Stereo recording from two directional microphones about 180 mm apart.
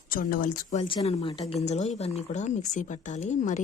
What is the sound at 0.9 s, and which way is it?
A woman's voice, 30° left (ahead or behind).